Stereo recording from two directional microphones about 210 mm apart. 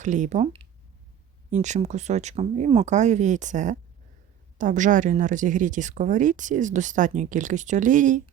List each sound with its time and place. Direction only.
0.0 s a woman's voice: 35° right (ahead or behind)